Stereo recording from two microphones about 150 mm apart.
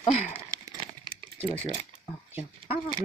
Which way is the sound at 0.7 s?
30° right (ahead or behind).